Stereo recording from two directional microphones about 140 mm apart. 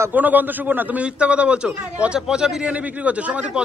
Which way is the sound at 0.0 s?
10° right (ahead or behind).